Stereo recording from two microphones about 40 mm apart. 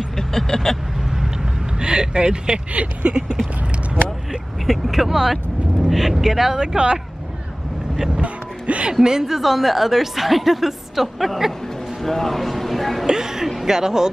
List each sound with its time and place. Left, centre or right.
0.2 s vehicle: centre
1.1 s vehicle: centre
1.8 s speech: right
2.7 s speech: right
4.6 s speech: centre; by 7.0 s right
8.1 s speech: right
9.0 s a woman's voice: centre
13.0 s speech: centre